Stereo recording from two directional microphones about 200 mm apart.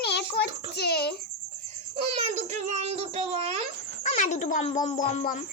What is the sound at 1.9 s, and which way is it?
A woman's voice, 35° right (ahead or behind).